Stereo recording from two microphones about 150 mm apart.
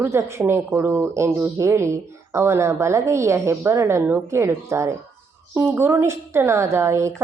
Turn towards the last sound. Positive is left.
turn(degrees=-20)  # may be behind; listen again after turning